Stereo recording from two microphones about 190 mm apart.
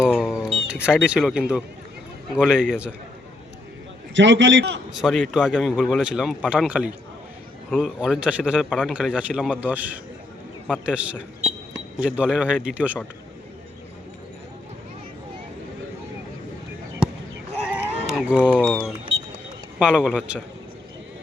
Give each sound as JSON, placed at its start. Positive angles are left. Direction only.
{"t": 0.1, "sound": "a man's voice", "side_deg": 0}
{"t": 4.1, "sound": "a man's voice", "side_deg": -75}
{"t": 4.9, "sound": "a man's voice", "side_deg": 0}
{"t": 17.7, "sound": "a sound", "side_deg": -5}
{"t": 18.6, "sound": "a man's voice", "side_deg": 5}